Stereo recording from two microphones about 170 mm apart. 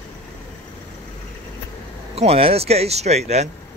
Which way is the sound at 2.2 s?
35° right (ahead or behind).